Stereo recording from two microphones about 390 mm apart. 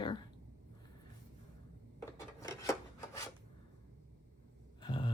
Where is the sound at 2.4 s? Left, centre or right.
Centre.